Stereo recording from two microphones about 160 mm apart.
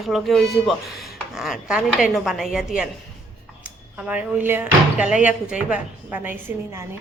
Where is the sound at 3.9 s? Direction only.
10° right (ahead or behind).